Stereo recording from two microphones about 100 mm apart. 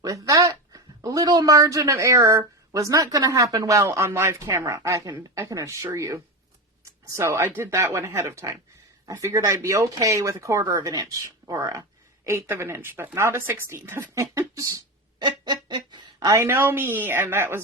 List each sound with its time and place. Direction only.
0.0 s speech: 35° right (ahead or behind)
14.8 s a sound: 50° right (ahead or behind)
16.3 s speech: 25° right (ahead or behind)